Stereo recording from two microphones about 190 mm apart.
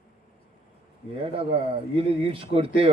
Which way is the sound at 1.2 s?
30° right (ahead or behind).